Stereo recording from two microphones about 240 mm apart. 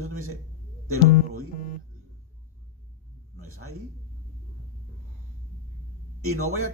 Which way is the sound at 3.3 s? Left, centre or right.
Right.